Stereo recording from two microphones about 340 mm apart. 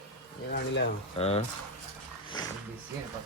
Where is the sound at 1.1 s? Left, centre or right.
Centre.